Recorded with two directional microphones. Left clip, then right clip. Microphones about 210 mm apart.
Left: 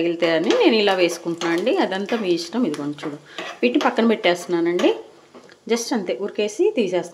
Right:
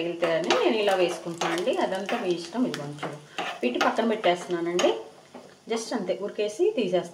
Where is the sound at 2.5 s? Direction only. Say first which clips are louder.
Left 6 dB; 45° left (ahead or behind).